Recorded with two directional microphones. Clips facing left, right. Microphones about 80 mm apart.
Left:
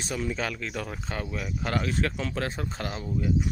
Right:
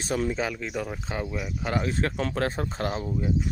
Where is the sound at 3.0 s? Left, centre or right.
Centre.